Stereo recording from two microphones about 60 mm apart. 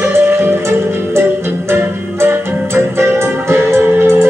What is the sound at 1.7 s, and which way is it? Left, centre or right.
Music, right.